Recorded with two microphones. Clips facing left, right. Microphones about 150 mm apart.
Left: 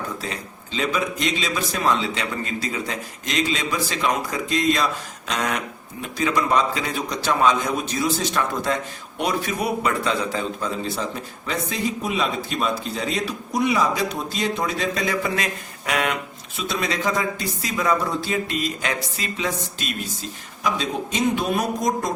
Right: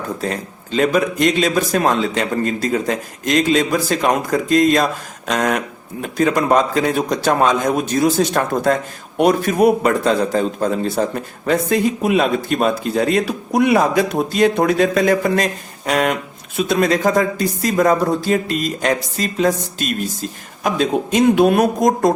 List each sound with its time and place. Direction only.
0.2 s a man's voice: 50° right (ahead or behind)
16.6 s a man's voice: 50° right (ahead or behind)
20.7 s a man's voice: 55° right (ahead or behind)